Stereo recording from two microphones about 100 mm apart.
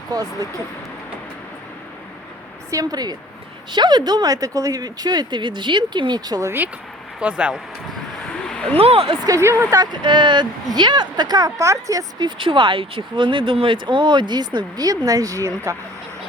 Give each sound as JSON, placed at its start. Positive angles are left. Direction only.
{"t": 0.1, "sound": "speech", "side_deg": -40}
{"t": 2.6, "sound": "speech", "side_deg": -35}
{"t": 7.2, "sound": "speech", "side_deg": -10}
{"t": 8.4, "sound": "a sound", "side_deg": 10}
{"t": 8.8, "sound": "speech", "side_deg": -75}
{"t": 9.2, "sound": "speech", "side_deg": -30}
{"t": 12.4, "sound": "speech", "side_deg": -60}